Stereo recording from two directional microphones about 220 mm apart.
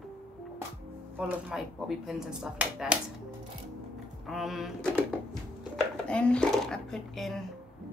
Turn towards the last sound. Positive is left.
turn(degrees=0)  # may be behind; listen again after turning